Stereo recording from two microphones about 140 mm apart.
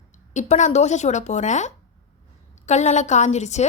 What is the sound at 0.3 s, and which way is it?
A woman's voice, 60° left (ahead or behind).